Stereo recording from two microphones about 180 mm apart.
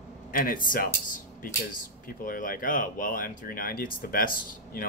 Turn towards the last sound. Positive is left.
turn(degrees=50)  # may be behind; listen again after turning